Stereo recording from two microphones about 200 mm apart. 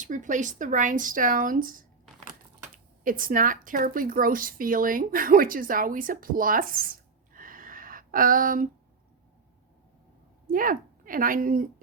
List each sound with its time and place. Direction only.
0.0 s speech: 40° right (ahead or behind)
7.3 s a sound: 45° right (ahead or behind)
10.4 s a woman's voice: 45° right (ahead or behind)